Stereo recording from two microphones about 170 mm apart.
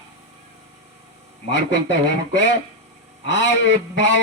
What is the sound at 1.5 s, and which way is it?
Speech, 90° left.